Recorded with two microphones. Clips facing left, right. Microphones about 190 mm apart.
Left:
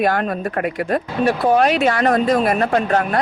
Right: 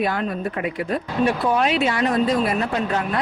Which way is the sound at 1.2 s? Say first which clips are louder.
Left 4 dB; 45° left (ahead or behind).